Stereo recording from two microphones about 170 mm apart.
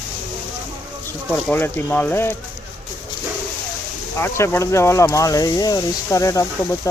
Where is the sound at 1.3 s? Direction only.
10° left (ahead or behind).